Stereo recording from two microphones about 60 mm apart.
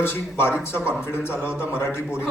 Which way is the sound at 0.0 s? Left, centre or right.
Left.